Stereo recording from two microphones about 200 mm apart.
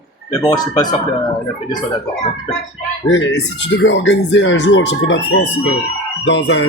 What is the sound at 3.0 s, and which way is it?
Speech, 65° left (ahead or behind).